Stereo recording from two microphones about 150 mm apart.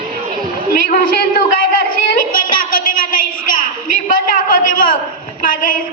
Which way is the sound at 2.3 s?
70° left (ahead or behind).